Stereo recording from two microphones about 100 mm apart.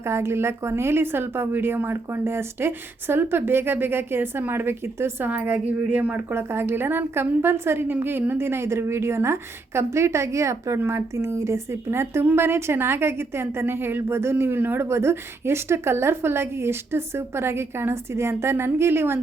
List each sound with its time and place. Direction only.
0.0 s a woman's voice: 25° right (ahead or behind)